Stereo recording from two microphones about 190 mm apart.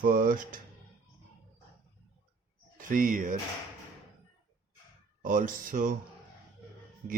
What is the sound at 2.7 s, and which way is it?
Speech, 45° right (ahead or behind).